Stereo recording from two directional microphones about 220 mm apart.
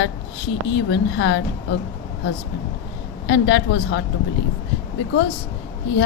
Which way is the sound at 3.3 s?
50° left (ahead or behind).